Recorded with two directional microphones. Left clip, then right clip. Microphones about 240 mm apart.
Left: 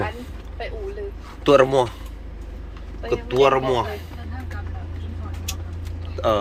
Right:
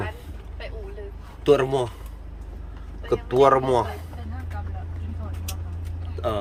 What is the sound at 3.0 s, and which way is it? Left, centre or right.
Speech, right.